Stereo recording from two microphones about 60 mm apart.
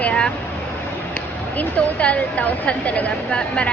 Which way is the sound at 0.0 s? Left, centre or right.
Centre.